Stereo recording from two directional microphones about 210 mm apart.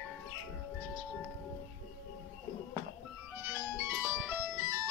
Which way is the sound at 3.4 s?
10° right (ahead or behind).